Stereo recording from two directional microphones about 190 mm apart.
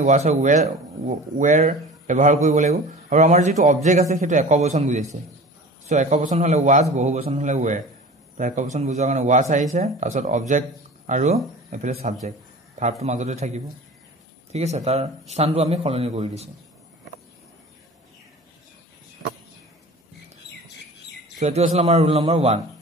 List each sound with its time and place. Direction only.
0.0 s speech: 40° right (ahead or behind)
12.3 s a sound: 40° right (ahead or behind)
13.0 s speech: 40° right (ahead or behind)
21.4 s speech: 35° right (ahead or behind)